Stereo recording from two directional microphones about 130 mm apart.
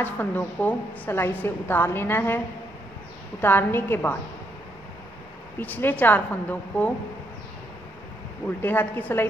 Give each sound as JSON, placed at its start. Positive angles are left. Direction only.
{"t": 0.0, "sound": "a woman's voice", "side_deg": 15}
{"t": 5.6, "sound": "a woman's voice", "side_deg": 15}
{"t": 8.5, "sound": "a woman's voice", "side_deg": 15}